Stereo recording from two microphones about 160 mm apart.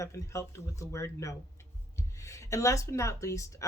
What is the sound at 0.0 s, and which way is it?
Speech, 20° left (ahead or behind).